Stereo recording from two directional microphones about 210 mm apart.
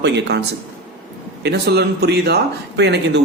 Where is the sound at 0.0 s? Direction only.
55° right (ahead or behind).